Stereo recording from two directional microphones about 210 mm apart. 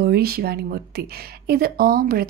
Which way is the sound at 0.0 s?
50° right (ahead or behind).